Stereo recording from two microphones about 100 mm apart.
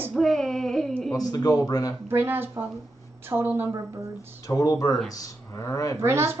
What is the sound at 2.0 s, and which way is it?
A woman's voice, 20° right (ahead or behind).